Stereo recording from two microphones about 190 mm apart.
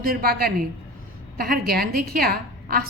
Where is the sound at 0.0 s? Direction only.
50° right (ahead or behind).